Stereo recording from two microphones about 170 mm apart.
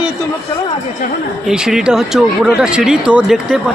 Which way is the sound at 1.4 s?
5° right (ahead or behind).